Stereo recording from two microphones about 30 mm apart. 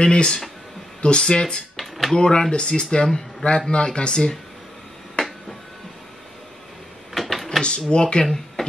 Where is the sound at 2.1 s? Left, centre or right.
Left.